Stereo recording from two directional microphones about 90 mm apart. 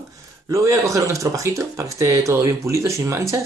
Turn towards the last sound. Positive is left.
turn(degrees=-35)  # may be behind; listen again after turning